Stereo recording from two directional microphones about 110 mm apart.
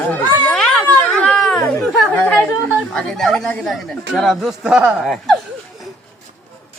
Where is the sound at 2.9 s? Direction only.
5° left (ahead or behind).